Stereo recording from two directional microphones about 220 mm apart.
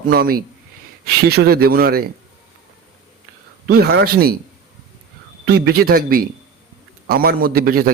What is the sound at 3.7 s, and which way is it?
Speech, 45° right (ahead or behind).